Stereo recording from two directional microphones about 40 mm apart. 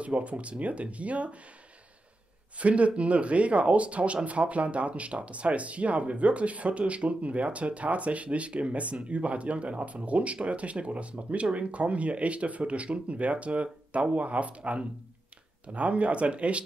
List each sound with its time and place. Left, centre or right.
0.0 s speech: right
2.6 s speech: right